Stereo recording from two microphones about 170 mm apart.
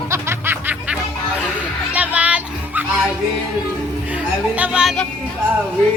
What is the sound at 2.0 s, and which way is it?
Music, 10° right (ahead or behind).